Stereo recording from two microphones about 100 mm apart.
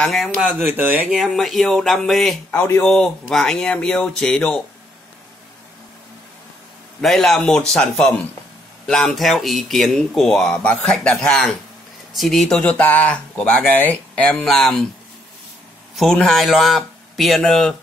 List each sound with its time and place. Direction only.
0.0 s speech: centre (ahead or behind)
0.4 s speech: 20° right (ahead or behind)
1.1 s speech: centre (ahead or behind)
7.0 s speech: 5° left (ahead or behind)
16.0 s speech: 5° left (ahead or behind)